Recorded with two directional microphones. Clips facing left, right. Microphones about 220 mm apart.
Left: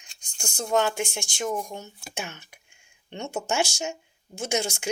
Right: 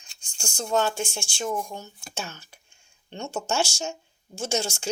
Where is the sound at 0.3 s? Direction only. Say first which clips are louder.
Left 1 dB; 20° left (ahead or behind).